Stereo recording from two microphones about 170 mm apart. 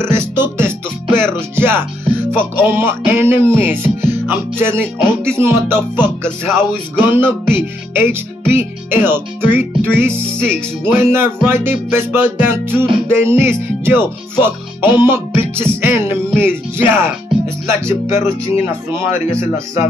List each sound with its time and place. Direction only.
0.0 s music: 15° right (ahead or behind)